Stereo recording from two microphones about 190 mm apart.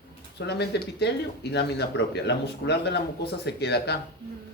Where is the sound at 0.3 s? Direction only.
60° left (ahead or behind).